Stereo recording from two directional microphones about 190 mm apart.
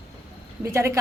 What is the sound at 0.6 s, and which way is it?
Speech, 15° right (ahead or behind).